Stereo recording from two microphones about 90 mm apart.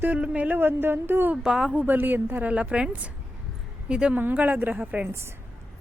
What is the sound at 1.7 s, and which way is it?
A woman's voice, 20° right (ahead or behind).